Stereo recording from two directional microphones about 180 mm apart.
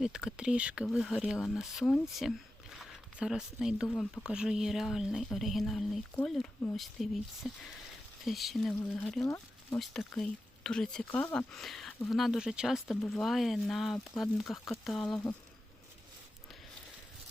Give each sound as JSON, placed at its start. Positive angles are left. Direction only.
{"t": 0.0, "sound": "speech", "side_deg": -5}
{"t": 2.1, "sound": "a sound", "side_deg": 0}
{"t": 3.8, "sound": "speech", "side_deg": 5}
{"t": 9.2, "sound": "speech", "side_deg": 15}
{"t": 9.7, "sound": "speech", "side_deg": 0}